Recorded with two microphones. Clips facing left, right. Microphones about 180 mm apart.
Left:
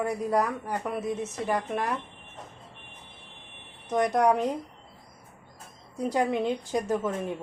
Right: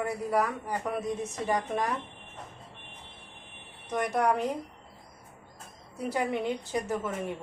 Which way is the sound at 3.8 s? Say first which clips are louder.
Left 4 dB; 10° left (ahead or behind).